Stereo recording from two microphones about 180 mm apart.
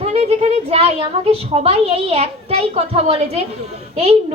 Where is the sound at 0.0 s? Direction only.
35° right (ahead or behind).